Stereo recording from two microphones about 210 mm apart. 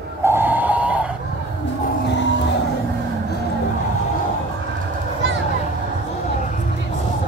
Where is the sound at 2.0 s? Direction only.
60° left (ahead or behind).